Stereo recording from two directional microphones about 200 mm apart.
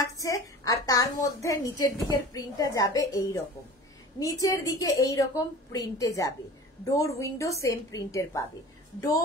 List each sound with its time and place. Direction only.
0.2 s a woman's voice: 15° left (ahead or behind)
4.2 s a woman's voice: 20° left (ahead or behind)